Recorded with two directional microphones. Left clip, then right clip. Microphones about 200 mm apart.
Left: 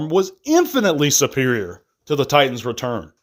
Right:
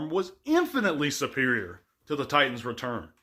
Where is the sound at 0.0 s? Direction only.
40° left (ahead or behind).